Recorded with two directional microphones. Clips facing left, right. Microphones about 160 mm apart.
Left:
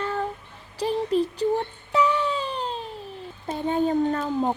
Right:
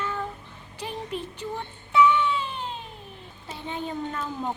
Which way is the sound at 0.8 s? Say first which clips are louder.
Left 10 dB; 35° left (ahead or behind).